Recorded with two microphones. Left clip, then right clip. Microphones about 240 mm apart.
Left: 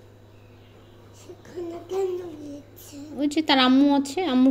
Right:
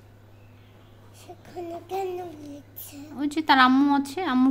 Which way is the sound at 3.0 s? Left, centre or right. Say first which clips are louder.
Left 3 dB; right.